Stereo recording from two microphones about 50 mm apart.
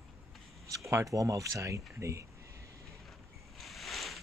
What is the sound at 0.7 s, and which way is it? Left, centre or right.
Speech, right.